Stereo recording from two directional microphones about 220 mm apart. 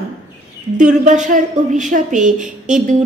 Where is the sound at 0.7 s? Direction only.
35° right (ahead or behind).